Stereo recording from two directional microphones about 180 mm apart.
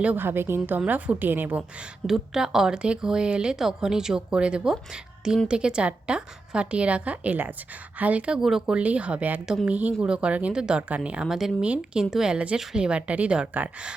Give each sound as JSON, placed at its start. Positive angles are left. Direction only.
{"t": 0.0, "sound": "a woman's voice", "side_deg": -10}